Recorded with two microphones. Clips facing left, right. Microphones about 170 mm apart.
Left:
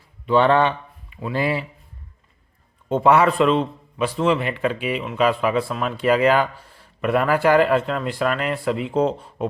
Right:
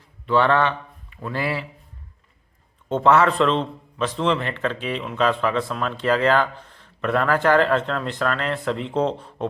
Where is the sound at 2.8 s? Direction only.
10° left (ahead or behind).